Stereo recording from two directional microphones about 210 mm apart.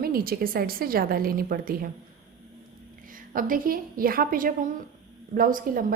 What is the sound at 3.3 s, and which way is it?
A woman's voice, 40° right (ahead or behind).